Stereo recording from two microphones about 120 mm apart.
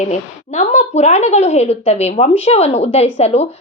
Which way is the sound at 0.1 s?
80° left.